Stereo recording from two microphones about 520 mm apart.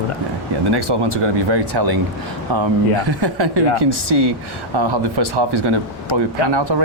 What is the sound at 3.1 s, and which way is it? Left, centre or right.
Speech, right.